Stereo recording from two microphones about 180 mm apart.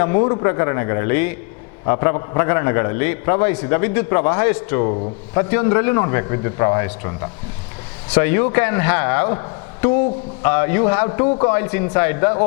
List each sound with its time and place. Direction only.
0.0 s a man's voice: 20° left (ahead or behind)